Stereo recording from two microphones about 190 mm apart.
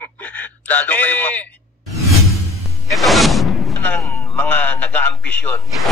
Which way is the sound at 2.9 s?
Centre (ahead or behind).